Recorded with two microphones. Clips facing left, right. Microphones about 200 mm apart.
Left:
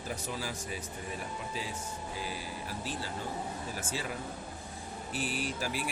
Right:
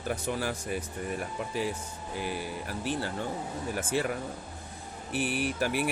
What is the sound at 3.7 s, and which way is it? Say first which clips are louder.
Speech: right 8 dB; 60° right (ahead or behind).